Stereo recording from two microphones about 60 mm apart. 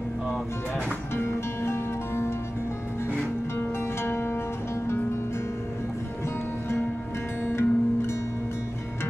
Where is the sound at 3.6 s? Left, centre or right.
Left.